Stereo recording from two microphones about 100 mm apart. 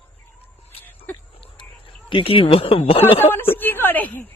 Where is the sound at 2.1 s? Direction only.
60° left (ahead or behind).